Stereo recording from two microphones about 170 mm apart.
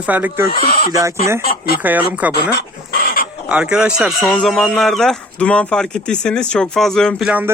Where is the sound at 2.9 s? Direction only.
60° left (ahead or behind).